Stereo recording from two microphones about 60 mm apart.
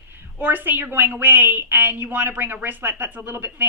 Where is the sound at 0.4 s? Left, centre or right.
Right.